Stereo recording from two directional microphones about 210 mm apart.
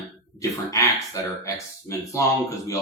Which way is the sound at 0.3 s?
15° left (ahead or behind).